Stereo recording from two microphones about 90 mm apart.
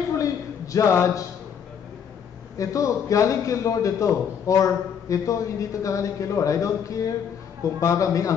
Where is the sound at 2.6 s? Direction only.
40° left (ahead or behind).